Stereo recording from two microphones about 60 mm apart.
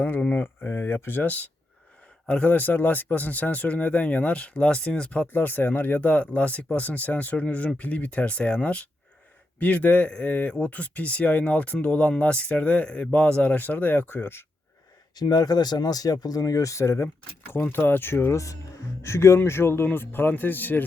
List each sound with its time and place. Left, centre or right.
0.3 s speech: left
15.3 s speech: left
17.5 s speech: left